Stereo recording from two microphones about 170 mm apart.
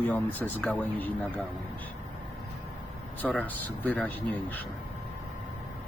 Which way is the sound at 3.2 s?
10° left (ahead or behind).